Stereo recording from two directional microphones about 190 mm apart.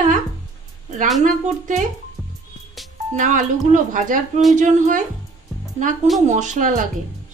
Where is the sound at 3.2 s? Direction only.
40° right (ahead or behind).